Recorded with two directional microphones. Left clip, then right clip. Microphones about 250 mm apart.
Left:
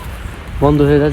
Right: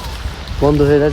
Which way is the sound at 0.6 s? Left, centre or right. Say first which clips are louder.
Even; left.